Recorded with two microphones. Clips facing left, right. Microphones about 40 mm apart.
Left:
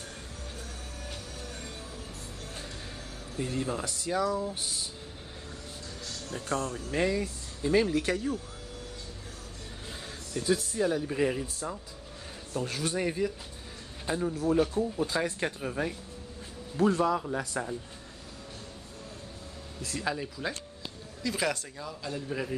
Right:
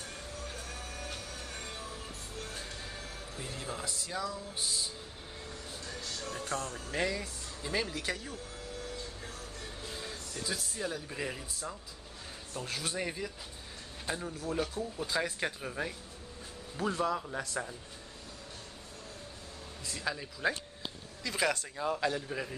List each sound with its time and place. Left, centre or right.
3.5 s speech: centre
4.2 s speech: left
6.3 s speech: centre
9.8 s music: centre
10.5 s speech: centre
12.5 s speech: centre
19.9 s speech: centre